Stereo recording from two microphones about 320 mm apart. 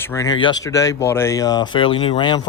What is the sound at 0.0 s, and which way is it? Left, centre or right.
Speech, centre.